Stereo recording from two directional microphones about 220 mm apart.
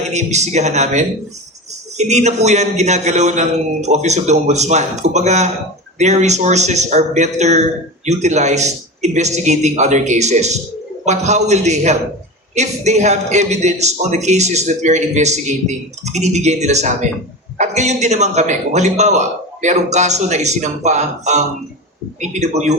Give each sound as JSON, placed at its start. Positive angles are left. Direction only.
{"t": 0.1, "sound": "speech", "side_deg": -30}